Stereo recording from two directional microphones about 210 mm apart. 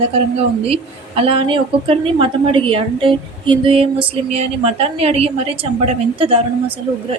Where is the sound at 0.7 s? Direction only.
25° right (ahead or behind).